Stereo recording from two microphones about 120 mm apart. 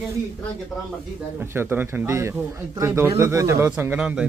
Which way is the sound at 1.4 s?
20° right (ahead or behind).